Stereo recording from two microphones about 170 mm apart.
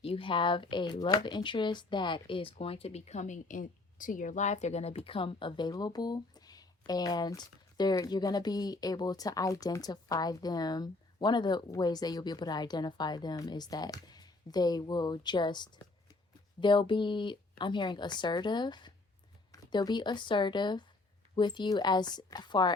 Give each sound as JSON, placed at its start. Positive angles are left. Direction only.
{"t": 0.0, "sound": "speech", "side_deg": 30}